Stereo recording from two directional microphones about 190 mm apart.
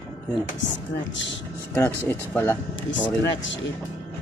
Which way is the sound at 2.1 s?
10° left (ahead or behind).